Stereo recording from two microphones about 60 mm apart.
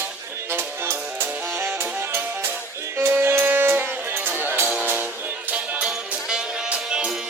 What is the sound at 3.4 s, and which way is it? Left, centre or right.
Music, right.